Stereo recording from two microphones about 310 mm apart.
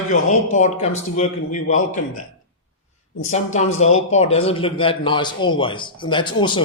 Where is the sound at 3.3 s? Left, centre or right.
Left.